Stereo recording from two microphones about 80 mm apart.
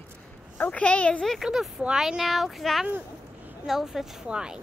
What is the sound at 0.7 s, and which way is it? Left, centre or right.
Speech, centre.